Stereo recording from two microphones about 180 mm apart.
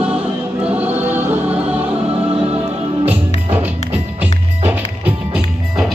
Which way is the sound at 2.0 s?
30° right (ahead or behind).